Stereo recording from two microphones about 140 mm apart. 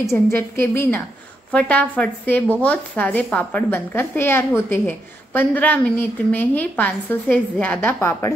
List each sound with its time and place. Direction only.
0.3 s a woman's voice: 15° left (ahead or behind)